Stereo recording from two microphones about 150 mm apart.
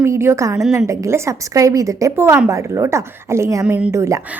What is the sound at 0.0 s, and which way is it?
A woman's voice, 15° right (ahead or behind).